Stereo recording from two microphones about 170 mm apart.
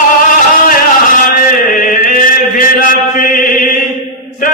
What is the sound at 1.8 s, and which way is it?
Chant, 55° left (ahead or behind).